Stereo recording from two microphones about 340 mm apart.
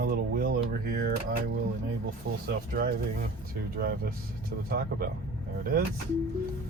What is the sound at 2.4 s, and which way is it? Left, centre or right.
Speech, right.